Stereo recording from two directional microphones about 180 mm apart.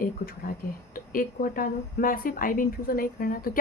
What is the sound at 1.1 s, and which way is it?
A woman's voice, 50° left (ahead or behind).